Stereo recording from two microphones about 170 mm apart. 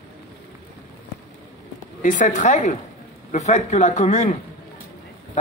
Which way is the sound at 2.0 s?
50° left (ahead or behind).